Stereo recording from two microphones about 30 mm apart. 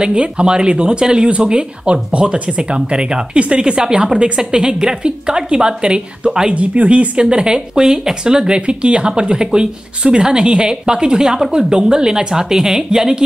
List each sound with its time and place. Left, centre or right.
0.0 s speech: right
6.5 s speech: right
7.2 s speech: right
7.8 s speech: centre
8.5 s speech: right; by 13.2 s centre